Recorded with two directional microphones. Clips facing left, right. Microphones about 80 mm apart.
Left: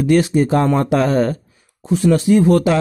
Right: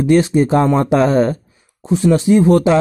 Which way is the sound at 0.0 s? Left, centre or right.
Right.